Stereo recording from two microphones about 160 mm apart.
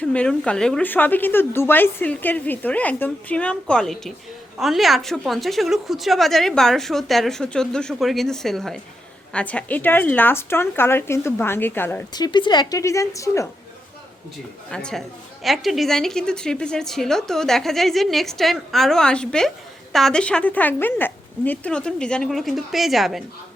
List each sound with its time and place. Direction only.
0.0 s a woman's voice: 5° left (ahead or behind)
12.1 s a woman's voice: 25° left (ahead or behind)
14.7 s a woman's voice: 5° left (ahead or behind)